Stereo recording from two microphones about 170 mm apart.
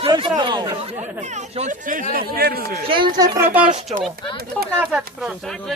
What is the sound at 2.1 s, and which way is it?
Speech, 65° right (ahead or behind).